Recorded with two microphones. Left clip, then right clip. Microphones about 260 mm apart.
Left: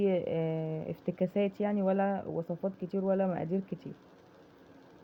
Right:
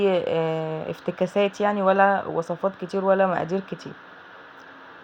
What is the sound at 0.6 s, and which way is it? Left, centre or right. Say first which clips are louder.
Speech: right 9 dB; right.